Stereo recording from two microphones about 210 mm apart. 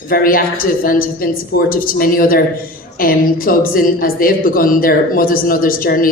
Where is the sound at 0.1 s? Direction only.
45° left (ahead or behind).